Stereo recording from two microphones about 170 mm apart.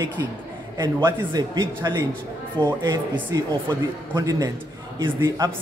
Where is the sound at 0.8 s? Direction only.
20° right (ahead or behind).